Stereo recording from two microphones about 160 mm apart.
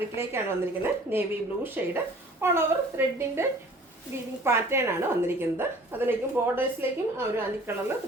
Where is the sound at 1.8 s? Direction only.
10° right (ahead or behind).